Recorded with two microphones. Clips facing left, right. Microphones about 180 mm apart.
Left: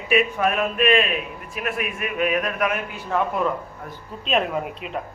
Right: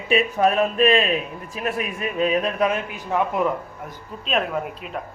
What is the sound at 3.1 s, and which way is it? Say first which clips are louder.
Speech: right 1 dB; 15° right (ahead or behind).